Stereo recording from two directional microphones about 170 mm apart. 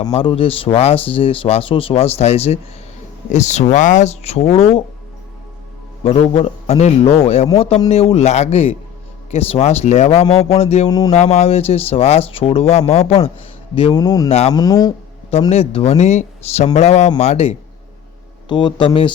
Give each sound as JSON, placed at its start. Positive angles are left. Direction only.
{"t": 0.0, "sound": "speech", "side_deg": 30}
{"t": 6.0, "sound": "speech", "side_deg": 35}
{"t": 10.8, "sound": "a man's voice", "side_deg": 20}
{"t": 11.1, "sound": "a man's voice", "side_deg": 40}
{"t": 14.3, "sound": "speech", "side_deg": 35}
{"t": 14.5, "sound": "a man's voice", "side_deg": 20}
{"t": 15.3, "sound": "speech", "side_deg": 35}
{"t": 18.4, "sound": "a man's voice", "side_deg": 25}